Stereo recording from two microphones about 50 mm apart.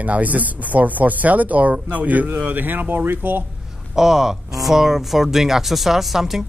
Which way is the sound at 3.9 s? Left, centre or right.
Centre.